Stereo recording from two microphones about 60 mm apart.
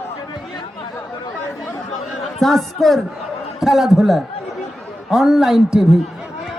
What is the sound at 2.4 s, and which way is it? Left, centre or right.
A man's voice, centre.